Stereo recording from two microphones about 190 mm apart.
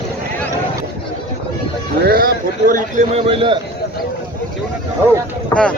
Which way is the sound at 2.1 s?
50° right (ahead or behind).